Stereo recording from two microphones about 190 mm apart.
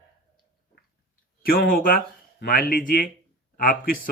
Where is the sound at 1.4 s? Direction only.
50° left (ahead or behind).